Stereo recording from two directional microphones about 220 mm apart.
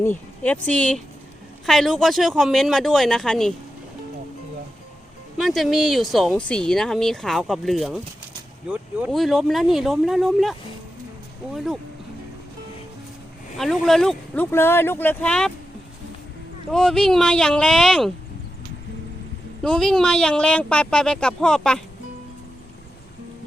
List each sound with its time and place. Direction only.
0.0 s speech: 10° left (ahead or behind)
5.4 s speech: centre (ahead or behind)
11.5 s speech: centre (ahead or behind)
13.6 s speech: centre (ahead or behind)
16.7 s speech: centre (ahead or behind)
19.6 s speech: centre (ahead or behind)